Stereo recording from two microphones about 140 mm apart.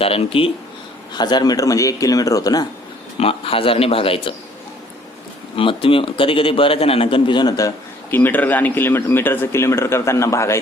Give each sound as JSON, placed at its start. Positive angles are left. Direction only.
{"t": 0.0, "sound": "speech", "side_deg": 40}
{"t": 1.1, "sound": "speech", "side_deg": 30}
{"t": 3.2, "sound": "a man's voice", "side_deg": 45}
{"t": 5.5, "sound": "a man's voice", "side_deg": 40}
{"t": 8.1, "sound": "speech", "side_deg": 15}